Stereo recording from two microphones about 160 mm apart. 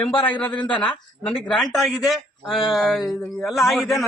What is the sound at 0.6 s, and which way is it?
Speech, 30° left (ahead or behind).